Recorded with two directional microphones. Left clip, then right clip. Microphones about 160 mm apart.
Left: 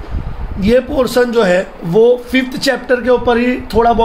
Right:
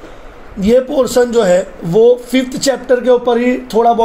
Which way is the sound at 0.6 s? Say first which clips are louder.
Right 1 dB; 15° right (ahead or behind).